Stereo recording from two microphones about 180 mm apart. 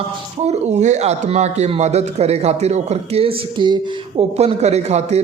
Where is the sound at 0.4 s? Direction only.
40° right (ahead or behind).